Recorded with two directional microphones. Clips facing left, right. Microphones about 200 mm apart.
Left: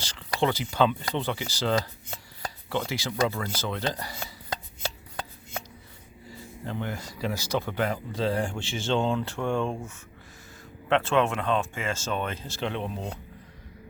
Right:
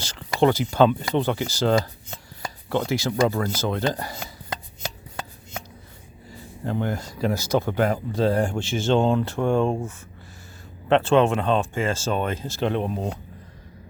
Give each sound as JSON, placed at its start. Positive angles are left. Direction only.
{"t": 0.0, "sound": "speech", "side_deg": -45}
{"t": 6.7, "sound": "speech", "side_deg": -45}
{"t": 10.8, "sound": "speech", "side_deg": -30}